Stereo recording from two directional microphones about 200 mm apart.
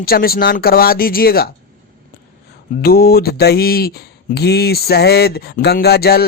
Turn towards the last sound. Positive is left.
turn(degrees=50)  # may be behind; listen again after turning